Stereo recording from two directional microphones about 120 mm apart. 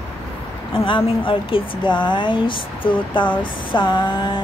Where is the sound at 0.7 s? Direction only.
45° left (ahead or behind).